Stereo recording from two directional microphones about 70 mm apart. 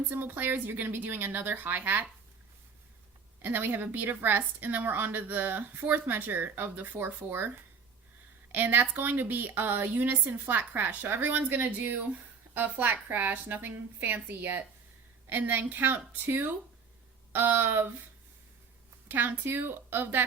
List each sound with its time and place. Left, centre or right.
0.1 s a woman's voice: right
3.4 s a woman's voice: right
8.5 s a woman's voice: right
19.0 s a woman's voice: right